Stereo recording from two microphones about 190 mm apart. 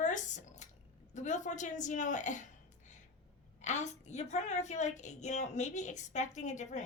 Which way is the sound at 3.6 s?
40° left (ahead or behind).